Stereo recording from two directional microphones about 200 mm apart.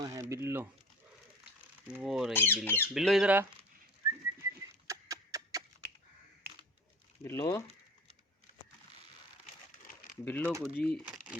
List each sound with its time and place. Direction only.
0.0 s a sound: 15° right (ahead or behind)
1.9 s speech: centre (ahead or behind)
2.3 s speech: 10° left (ahead or behind)
2.9 s speech: centre (ahead or behind)
4.9 s horse: 15° right (ahead or behind)
7.3 s speech: 15° left (ahead or behind)
10.2 s speech: 10° left (ahead or behind)
11.0 s crumpling: 5° right (ahead or behind)